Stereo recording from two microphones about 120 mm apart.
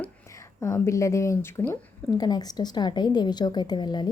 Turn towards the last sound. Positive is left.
turn(degrees=35)  # may be behind; listen again after turning